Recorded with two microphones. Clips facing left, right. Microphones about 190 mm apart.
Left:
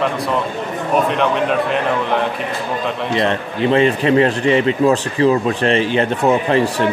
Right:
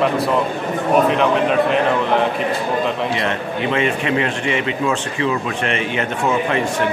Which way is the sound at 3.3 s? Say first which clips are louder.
Left 4 dB; 35° left (ahead or behind).